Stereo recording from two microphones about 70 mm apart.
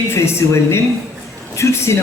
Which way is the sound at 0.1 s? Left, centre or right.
Left.